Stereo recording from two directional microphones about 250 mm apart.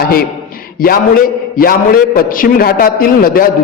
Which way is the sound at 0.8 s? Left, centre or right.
Left.